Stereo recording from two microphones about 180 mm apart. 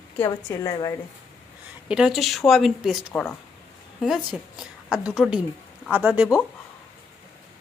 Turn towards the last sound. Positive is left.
turn(degrees=-5)  # may be behind; listen again after turning